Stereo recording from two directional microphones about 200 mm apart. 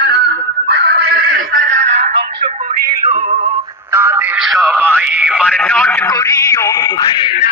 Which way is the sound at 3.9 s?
10° right (ahead or behind).